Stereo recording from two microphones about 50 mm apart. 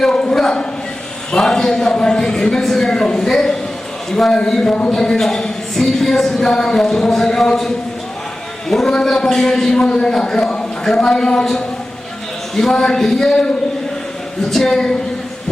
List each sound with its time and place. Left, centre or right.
0.0 s a sound: centre
1.3 s a woman's voice: centre
8.7 s a woman's voice: centre
14.5 s a woman's voice: centre